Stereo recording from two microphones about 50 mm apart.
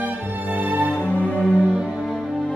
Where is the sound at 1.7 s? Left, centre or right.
Centre.